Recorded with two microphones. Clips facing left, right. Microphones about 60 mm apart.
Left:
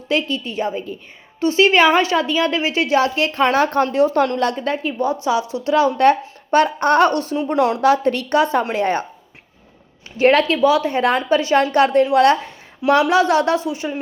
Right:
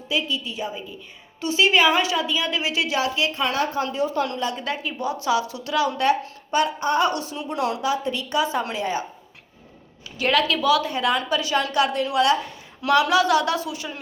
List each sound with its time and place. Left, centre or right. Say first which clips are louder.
0.1 s a woman's voice: left 5 dB; left
3.5 s a woman's voice: left 8 dB; left
4.5 s a woman's voice: left 7 dB; left
6.0 s speech: left 7 dB; left
7.1 s speech: left 8 dB; left
7.8 s a woman's voice: left 9 dB; left
10.2 s a woman's voice: left 7 dB; left
12.8 s a woman's voice: left 4 dB; left